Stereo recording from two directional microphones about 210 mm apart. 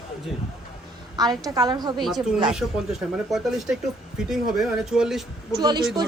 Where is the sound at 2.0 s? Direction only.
Centre (ahead or behind).